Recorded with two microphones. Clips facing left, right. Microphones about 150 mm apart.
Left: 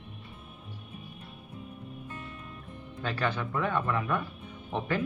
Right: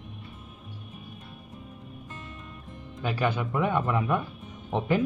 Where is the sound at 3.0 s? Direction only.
15° right (ahead or behind).